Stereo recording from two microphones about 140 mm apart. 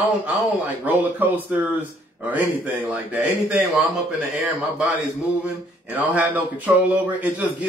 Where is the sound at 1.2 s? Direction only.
15° right (ahead or behind).